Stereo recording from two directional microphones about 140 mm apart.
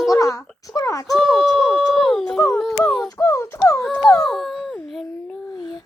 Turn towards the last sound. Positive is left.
turn(degrees=0)  # may be behind; listen again after turning